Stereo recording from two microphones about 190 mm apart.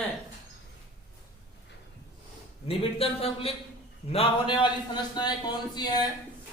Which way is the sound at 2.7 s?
30° left (ahead or behind).